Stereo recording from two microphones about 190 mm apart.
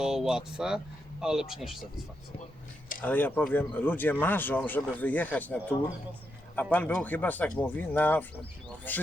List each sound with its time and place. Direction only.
0.0 s speech: 5° right (ahead or behind)
3.0 s speech: 10° left (ahead or behind)